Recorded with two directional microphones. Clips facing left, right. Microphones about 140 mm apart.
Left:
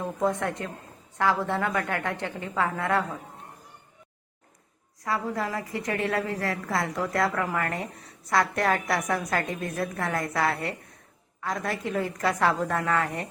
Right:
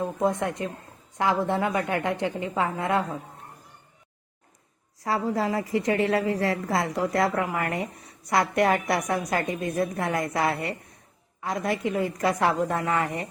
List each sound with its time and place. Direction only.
0.0 s a woman's voice: 15° right (ahead or behind)
5.0 s a woman's voice: 30° right (ahead or behind); by 13.2 s 5° right (ahead or behind)